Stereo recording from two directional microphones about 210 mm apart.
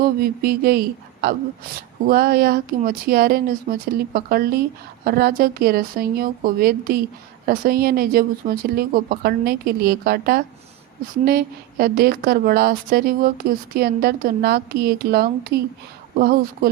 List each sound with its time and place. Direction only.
0.0 s a woman's voice: 45° right (ahead or behind)